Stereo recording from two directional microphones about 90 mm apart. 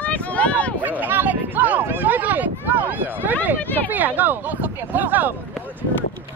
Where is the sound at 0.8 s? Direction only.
20° right (ahead or behind).